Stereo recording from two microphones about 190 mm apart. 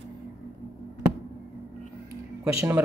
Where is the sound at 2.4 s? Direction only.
15° right (ahead or behind).